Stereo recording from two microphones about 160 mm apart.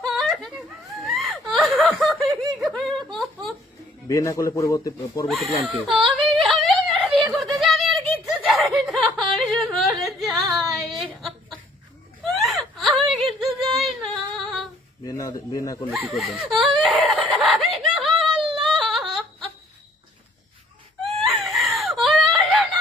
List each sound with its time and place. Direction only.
0.0 s whimper: centre (ahead or behind)
1.0 s a sound: centre (ahead or behind)
4.1 s speech: 20° left (ahead or behind)
5.3 s speech: centre (ahead or behind)
5.6 s whimper: centre (ahead or behind)
7.2 s a sound: centre (ahead or behind)
8.2 s snicker: centre (ahead or behind)
10.2 s a sound: centre (ahead or behind)
12.2 s whimper: centre (ahead or behind)
13.7 s humming: centre (ahead or behind)
15.0 s speech: 20° left (ahead or behind)
15.9 s speech: centre (ahead or behind)
17.2 s a sound: centre (ahead or behind)
21.2 s whimper: centre (ahead or behind)